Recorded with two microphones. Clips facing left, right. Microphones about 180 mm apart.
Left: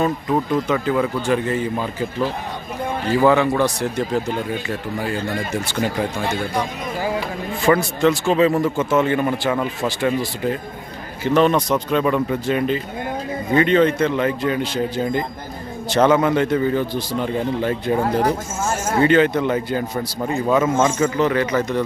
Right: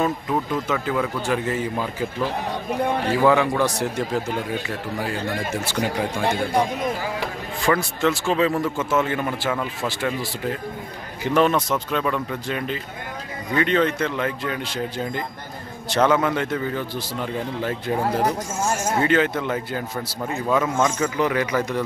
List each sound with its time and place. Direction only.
0.0 s a man's voice: centre (ahead or behind)
3.1 s a man's voice: 5° right (ahead or behind)
4.6 s a man's voice: centre (ahead or behind)
7.7 s a man's voice: 15° left (ahead or behind)
8.3 s a man's voice: 5° left (ahead or behind)
21.2 s speech: 10° right (ahead or behind)